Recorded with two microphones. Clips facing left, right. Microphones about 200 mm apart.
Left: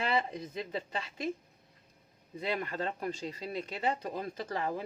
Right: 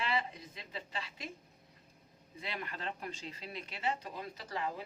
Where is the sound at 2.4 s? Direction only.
45° left (ahead or behind).